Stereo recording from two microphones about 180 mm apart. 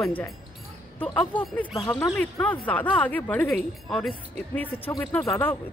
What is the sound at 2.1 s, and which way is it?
Speech, 10° left (ahead or behind).